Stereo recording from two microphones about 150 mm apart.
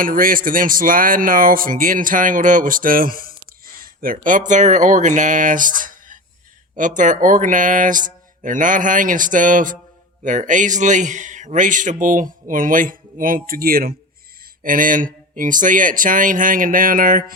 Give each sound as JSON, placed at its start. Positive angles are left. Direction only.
{"t": 0.0, "sound": "speech", "side_deg": -65}
{"t": 14.6, "sound": "speech", "side_deg": -65}